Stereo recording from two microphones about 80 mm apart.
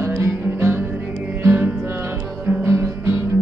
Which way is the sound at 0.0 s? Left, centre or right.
Right.